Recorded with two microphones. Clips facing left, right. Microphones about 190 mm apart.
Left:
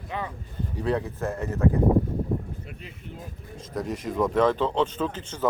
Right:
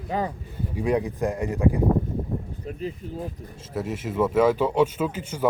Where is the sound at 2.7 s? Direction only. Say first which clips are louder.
Right 11 dB; 35° right (ahead or behind).